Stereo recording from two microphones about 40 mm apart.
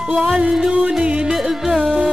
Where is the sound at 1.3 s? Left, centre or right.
Centre.